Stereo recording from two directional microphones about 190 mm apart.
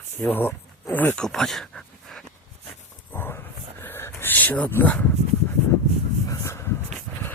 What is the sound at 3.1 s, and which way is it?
Dog, 10° left (ahead or behind).